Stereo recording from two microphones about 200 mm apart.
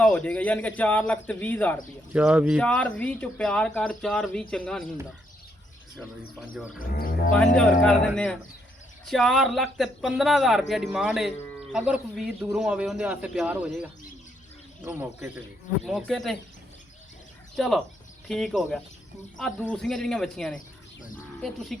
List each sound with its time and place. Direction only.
0.0 s speech: 5° left (ahead or behind)
2.1 s speech: 5° right (ahead or behind)
2.6 s speech: 5° left (ahead or behind)
6.7 s speech: 45° left (ahead or behind)
7.5 s speech: 5° left (ahead or behind)
14.8 s speech: 10° right (ahead or behind)
17.6 s speech: centre (ahead or behind)